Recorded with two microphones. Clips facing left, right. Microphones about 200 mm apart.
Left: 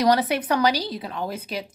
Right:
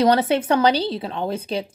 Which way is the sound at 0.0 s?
25° right (ahead or behind).